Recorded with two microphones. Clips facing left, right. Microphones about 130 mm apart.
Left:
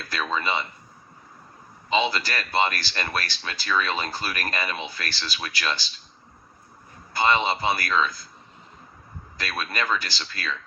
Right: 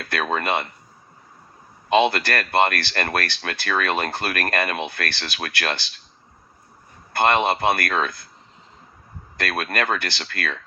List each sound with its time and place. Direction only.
0.0 s speech: 60° right (ahead or behind)
1.9 s speech: 60° right (ahead or behind)
7.1 s speech: 60° right (ahead or behind)
9.4 s speech: 55° right (ahead or behind)